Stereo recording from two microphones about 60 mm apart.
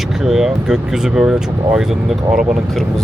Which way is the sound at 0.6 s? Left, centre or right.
Centre.